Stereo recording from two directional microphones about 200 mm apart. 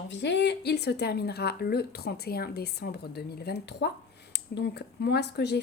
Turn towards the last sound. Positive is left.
turn(degrees=55)  # may be behind; listen again after turning